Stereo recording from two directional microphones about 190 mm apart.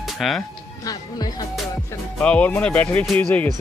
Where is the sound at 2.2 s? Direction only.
5° left (ahead or behind).